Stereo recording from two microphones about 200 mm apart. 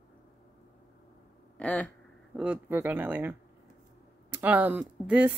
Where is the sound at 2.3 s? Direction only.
5° right (ahead or behind).